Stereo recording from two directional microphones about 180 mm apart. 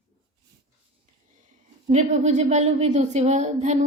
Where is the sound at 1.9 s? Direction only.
40° right (ahead or behind).